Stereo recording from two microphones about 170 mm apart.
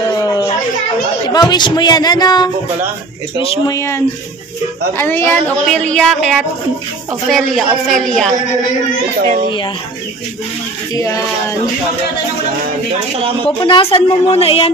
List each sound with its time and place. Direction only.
0.2 s a sound: 20° left (ahead or behind)
1.3 s speech: 25° left (ahead or behind)
3.6 s a woman's voice: 20° left (ahead or behind); by 8.3 s 5° left (ahead or behind)
11.0 s speech: 20° left (ahead or behind)
13.5 s a woman's voice: 35° left (ahead or behind)